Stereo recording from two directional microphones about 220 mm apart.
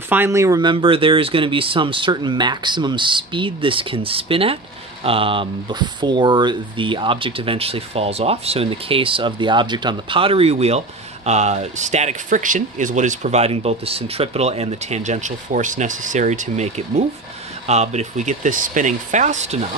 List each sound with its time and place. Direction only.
0.1 s speech: 10° right (ahead or behind); by 19.7 s 30° right (ahead or behind)